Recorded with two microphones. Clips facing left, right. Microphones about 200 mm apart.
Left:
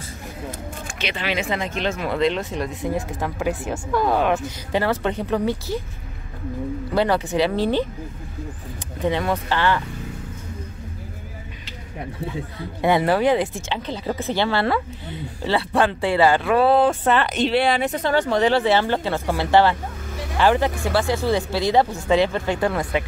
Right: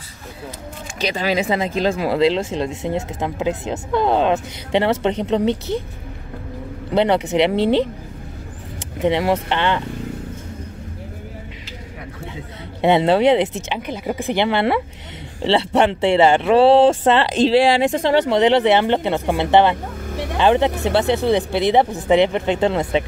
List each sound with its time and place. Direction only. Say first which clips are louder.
0.9 s speech: right 6 dB; 40° right (ahead or behind); by 5.8 s 20° right (ahead or behind)
6.9 s speech: right 4 dB; 20° right (ahead or behind)
9.0 s speech: right 4 dB; 25° right (ahead or behind)
12.8 s speech: right 4 dB; 25° right (ahead or behind)